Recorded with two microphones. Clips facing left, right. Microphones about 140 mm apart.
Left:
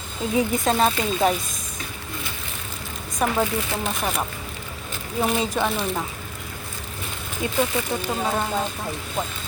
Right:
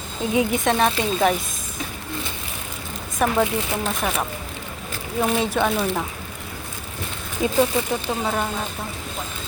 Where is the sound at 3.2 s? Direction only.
Centre (ahead or behind).